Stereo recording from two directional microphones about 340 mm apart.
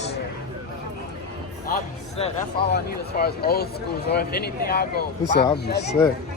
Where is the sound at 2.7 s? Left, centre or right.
Left.